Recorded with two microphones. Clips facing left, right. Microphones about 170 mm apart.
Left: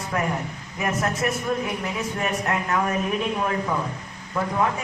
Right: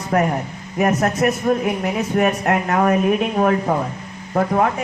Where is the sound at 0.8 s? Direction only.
40° right (ahead or behind).